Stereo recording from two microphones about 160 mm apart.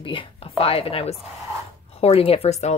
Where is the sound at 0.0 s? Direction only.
35° left (ahead or behind).